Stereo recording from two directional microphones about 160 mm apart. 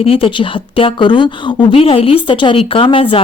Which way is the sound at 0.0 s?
35° left (ahead or behind).